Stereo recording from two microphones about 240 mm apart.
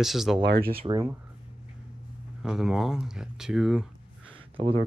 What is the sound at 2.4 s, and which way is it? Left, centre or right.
Speech, centre.